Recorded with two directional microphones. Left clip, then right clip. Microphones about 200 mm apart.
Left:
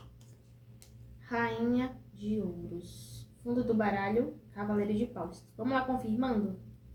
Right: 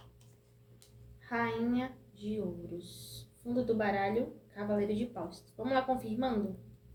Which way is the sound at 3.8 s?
30° right (ahead or behind).